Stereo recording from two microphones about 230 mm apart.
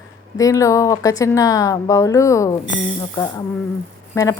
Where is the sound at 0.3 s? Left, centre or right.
Centre.